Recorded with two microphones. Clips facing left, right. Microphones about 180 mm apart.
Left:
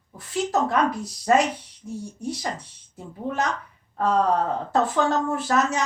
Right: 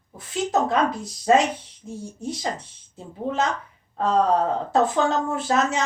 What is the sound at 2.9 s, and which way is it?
Speech, 25° right (ahead or behind).